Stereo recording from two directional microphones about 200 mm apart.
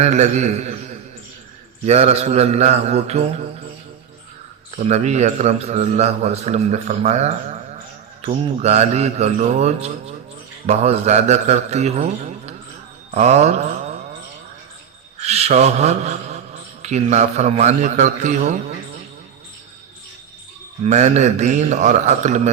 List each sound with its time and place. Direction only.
0.0 s a man's voice: 35° right (ahead or behind)
4.9 s a man's voice: 35° right (ahead or behind)
15.2 s a man's voice: 30° right (ahead or behind)
20.8 s a man's voice: 35° right (ahead or behind)